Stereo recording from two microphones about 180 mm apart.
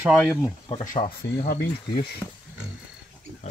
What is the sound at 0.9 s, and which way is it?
Speech, 30° left (ahead or behind).